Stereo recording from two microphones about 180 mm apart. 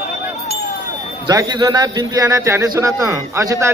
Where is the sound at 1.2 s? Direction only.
20° right (ahead or behind).